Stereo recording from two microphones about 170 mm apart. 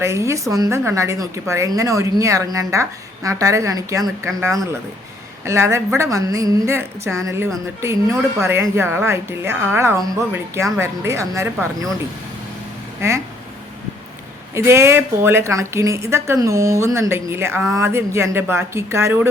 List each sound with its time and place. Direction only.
0.0 s a woman's voice: 15° right (ahead or behind)
13.0 s a woman's voice: 15° right (ahead or behind)
14.5 s a woman's voice: 15° right (ahead or behind)